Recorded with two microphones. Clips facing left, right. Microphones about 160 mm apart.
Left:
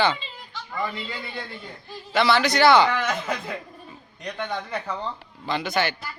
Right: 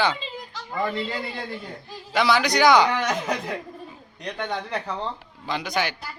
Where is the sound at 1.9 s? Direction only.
5° right (ahead or behind).